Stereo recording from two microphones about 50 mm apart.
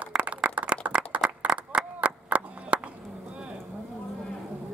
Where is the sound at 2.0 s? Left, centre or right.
Right.